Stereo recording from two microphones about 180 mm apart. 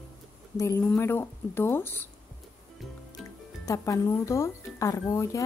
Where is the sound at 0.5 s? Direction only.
15° left (ahead or behind).